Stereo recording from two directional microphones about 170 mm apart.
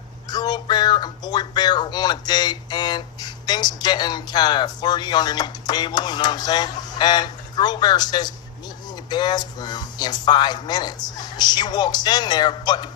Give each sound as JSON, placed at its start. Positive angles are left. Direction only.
{"t": 0.3, "sound": "a man's voice", "side_deg": 25}